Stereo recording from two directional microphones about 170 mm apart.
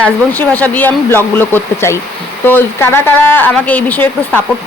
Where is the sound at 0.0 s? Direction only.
10° left (ahead or behind).